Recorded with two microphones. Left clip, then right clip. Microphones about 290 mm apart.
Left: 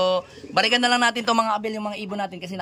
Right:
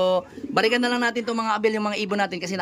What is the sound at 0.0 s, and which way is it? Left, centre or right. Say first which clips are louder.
A man's voice: even; centre.